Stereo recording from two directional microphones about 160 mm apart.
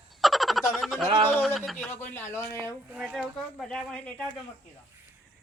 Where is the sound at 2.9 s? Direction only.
5° right (ahead or behind).